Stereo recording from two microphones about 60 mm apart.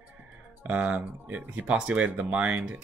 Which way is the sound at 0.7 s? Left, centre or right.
Right.